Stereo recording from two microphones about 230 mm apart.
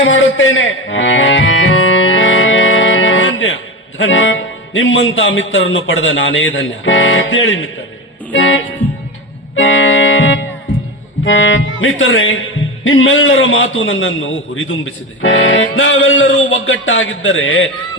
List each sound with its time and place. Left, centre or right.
0.0 s music: left
3.9 s speech: left
8.3 s music: left
9.6 s music: left
11.3 s speech: left